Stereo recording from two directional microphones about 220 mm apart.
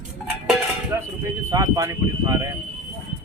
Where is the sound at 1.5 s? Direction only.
15° right (ahead or behind).